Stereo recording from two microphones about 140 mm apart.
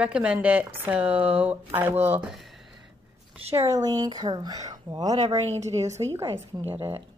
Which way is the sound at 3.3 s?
45° right (ahead or behind).